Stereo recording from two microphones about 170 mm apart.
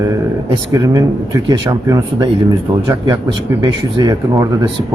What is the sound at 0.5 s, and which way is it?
Speech, 20° right (ahead or behind).